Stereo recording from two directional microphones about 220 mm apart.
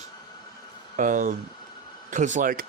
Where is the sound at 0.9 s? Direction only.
35° right (ahead or behind).